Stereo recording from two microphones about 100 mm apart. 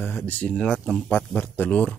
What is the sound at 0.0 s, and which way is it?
Speech, 20° left (ahead or behind).